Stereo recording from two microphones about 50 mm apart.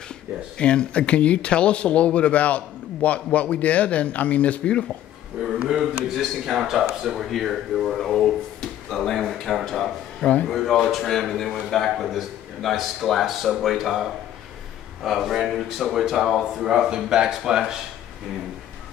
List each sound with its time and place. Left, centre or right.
0.6 s speech: left
6.1 s a man's voice: centre
10.2 s speech: left
10.5 s a man's voice: centre
15.0 s a man's voice: centre